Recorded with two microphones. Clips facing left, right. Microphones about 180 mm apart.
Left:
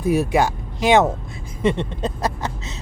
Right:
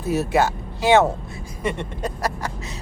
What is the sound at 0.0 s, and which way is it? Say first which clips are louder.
Speech: left 2 dB; 15° left (ahead or behind).